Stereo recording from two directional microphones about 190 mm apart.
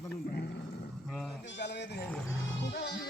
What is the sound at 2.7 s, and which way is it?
Music, 60° left (ahead or behind).